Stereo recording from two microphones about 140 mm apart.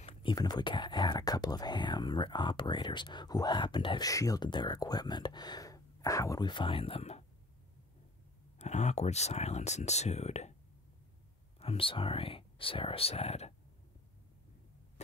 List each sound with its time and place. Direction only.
0.2 s speech: 30° left (ahead or behind)
4.1 s speech: 25° left (ahead or behind); by 7.2 s 50° left (ahead or behind)
8.5 s speech: 55° left (ahead or behind)
11.6 s speech: 40° left (ahead or behind)